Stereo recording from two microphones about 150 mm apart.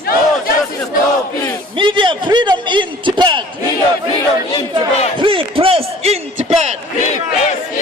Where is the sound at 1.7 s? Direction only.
35° right (ahead or behind).